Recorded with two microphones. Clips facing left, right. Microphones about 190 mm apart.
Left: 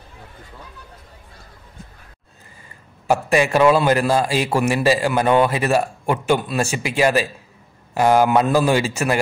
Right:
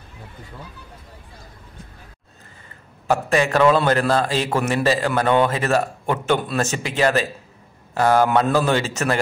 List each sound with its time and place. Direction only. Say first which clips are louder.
3.1 s a man's voice: left 2 dB; 15° left (ahead or behind)